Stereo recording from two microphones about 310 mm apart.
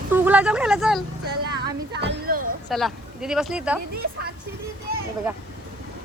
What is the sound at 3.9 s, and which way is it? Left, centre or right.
Speech, right.